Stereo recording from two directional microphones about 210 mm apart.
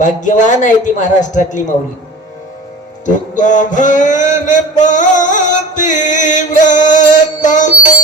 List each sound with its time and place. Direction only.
0.0 s mantra: 35° left (ahead or behind)
3.1 s mantra: 35° left (ahead or behind)